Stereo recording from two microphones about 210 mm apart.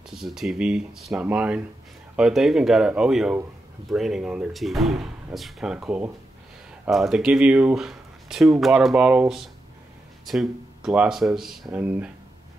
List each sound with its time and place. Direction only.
0.1 s speech: centre (ahead or behind)